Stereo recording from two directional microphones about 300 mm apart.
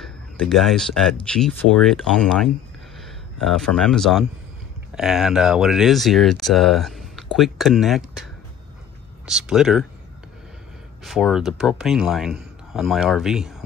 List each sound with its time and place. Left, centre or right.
0.0 s speech: centre
11.1 s speech: centre